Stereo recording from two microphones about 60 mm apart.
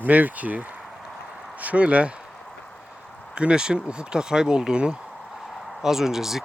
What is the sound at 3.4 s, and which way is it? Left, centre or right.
Speech, centre.